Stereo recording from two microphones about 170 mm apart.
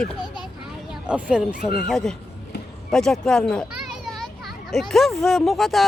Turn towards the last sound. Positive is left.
turn(degrees=0)  # may be behind; listen again after turning